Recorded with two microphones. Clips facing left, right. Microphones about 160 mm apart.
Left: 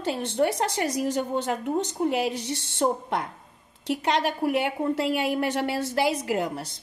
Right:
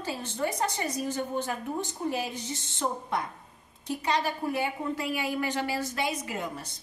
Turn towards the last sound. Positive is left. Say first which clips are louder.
# left 8 dB
turn(degrees=80)